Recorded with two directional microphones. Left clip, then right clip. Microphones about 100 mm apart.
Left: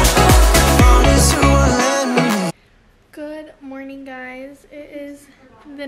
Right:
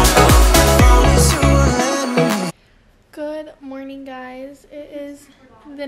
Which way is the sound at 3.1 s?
20° right (ahead or behind).